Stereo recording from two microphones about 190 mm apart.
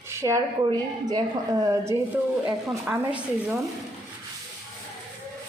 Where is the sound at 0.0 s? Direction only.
15° right (ahead or behind).